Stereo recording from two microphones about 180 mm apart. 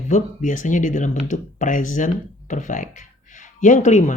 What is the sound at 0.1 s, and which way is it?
Speech, 45° left (ahead or behind).